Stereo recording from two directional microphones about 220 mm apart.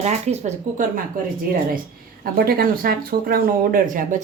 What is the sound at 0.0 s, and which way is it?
Speech, 30° right (ahead or behind).